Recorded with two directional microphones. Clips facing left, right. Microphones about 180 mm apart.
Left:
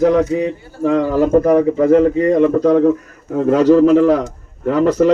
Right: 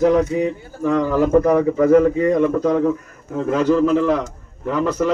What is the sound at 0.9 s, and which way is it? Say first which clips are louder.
Speech: left 2 dB; 40° left (ahead or behind).